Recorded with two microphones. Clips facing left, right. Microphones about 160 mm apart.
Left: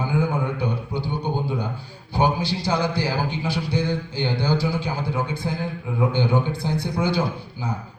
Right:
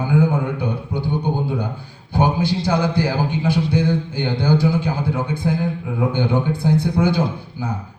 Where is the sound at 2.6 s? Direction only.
55° right (ahead or behind).